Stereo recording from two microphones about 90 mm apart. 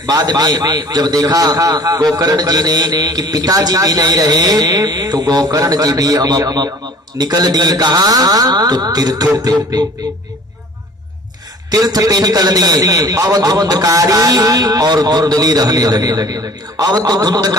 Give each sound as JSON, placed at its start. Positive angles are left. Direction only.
{"t": 0.0, "sound": "a man's voice", "side_deg": -45}
{"t": 11.7, "sound": "a man's voice", "side_deg": -45}